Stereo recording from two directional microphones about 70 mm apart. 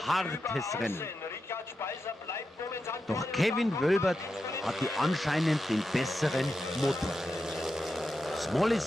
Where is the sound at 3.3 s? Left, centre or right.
Centre.